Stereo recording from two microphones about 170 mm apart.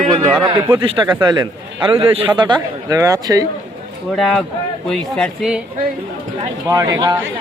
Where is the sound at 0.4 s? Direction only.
30° right (ahead or behind).